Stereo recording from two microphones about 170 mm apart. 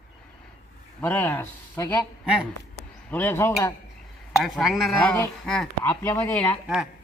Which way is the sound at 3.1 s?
15° left (ahead or behind).